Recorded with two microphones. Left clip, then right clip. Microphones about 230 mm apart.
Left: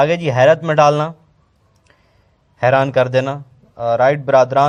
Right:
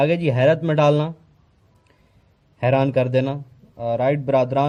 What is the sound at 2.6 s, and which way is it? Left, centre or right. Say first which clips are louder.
A man's voice: left 6 dB; centre.